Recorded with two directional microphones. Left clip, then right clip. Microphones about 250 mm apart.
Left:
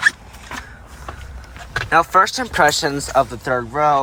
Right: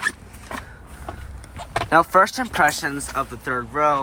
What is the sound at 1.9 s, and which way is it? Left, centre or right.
Speech, centre.